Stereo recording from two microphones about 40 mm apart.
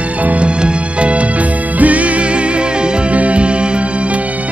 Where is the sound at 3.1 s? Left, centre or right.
Right.